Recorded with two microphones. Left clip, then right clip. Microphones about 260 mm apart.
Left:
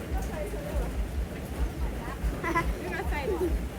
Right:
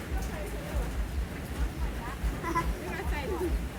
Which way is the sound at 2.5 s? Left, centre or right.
Centre.